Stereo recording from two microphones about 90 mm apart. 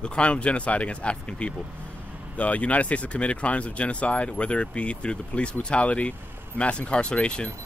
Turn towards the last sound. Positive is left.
turn(degrees=10)  # may be behind; listen again after turning